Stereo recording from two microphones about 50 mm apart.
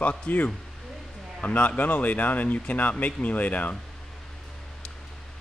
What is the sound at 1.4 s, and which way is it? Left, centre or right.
Speech, left.